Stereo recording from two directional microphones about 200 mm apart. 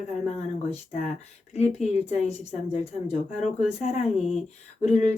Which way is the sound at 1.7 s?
35° left (ahead or behind).